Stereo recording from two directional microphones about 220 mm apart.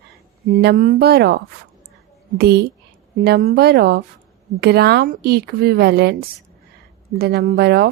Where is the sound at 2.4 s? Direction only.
45° right (ahead or behind).